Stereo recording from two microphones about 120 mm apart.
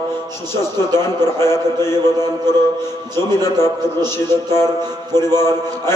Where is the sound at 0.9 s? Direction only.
20° left (ahead or behind).